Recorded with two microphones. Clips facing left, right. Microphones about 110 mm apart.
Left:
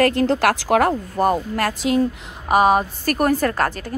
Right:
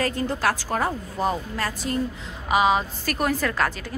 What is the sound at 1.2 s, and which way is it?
Speech, 60° left (ahead or behind).